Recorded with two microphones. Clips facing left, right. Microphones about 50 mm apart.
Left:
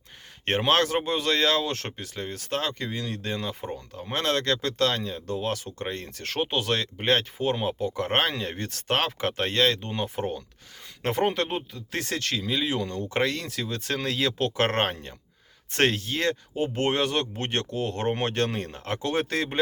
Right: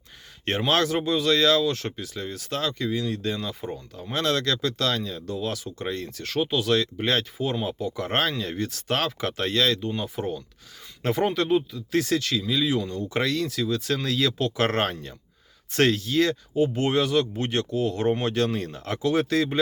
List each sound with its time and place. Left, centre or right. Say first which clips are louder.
0.4 s speech: even; left
5.2 s speech: even; left